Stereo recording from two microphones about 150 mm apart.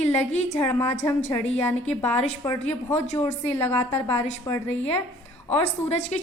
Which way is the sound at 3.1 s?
45° left (ahead or behind).